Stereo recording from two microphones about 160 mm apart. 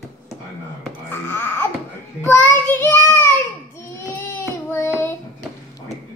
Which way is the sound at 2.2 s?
15° left (ahead or behind).